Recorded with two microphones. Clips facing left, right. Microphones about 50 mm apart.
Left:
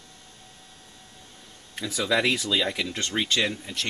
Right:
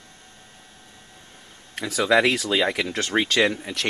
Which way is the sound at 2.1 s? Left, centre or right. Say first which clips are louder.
Right 4 dB; right.